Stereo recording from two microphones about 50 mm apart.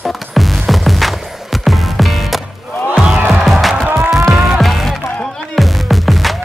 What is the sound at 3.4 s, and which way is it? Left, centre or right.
Music, centre.